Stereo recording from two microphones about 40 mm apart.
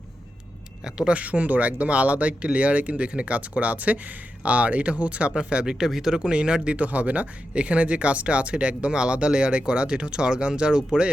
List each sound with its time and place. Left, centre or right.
0.9 s speech: centre
1.1 s speech: right
5.7 s speech: centre
6.1 s speech: right
6.8 s speech: right; by 11.1 s centre